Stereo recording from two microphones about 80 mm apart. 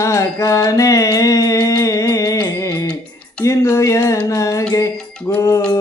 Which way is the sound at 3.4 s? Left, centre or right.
Left.